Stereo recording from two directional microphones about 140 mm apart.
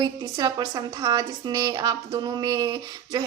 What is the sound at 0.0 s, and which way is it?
Speech, 30° right (ahead or behind).